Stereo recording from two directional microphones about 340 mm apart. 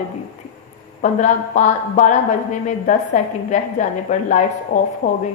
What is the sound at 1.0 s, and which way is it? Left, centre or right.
A woman's voice, left.